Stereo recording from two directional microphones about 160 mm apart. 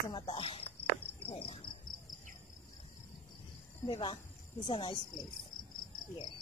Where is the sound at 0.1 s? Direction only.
35° left (ahead or behind).